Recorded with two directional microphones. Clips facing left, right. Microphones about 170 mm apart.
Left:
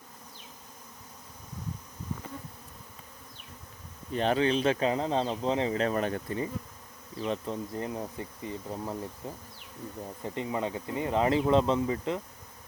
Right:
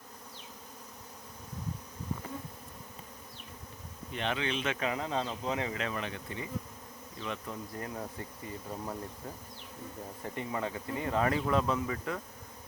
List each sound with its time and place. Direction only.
4.1 s speech: 40° left (ahead or behind)